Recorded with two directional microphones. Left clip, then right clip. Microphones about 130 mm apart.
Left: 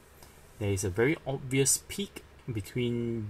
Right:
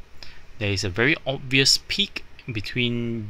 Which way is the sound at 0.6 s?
15° right (ahead or behind).